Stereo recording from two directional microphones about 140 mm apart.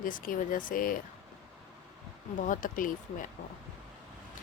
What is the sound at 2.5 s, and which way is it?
Speech, 75° left (ahead or behind).